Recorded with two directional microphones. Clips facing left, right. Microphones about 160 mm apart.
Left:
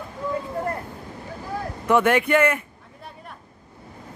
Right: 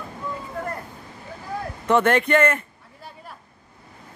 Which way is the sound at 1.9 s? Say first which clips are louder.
Even; 10° left (ahead or behind).